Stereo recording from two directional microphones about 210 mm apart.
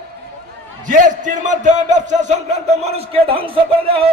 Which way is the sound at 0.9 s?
35° right (ahead or behind).